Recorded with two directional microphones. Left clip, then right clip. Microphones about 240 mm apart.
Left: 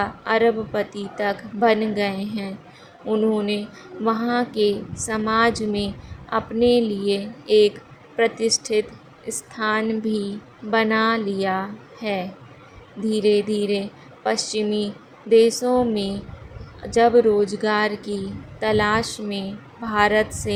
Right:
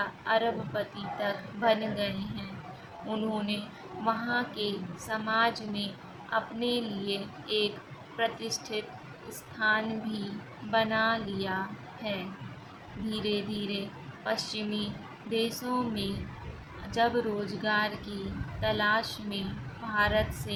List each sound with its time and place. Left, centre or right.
0.0 s a woman's voice: left
13.1 s a woman's voice: left